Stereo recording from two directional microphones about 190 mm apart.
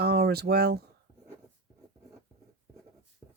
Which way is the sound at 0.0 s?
55° right (ahead or behind).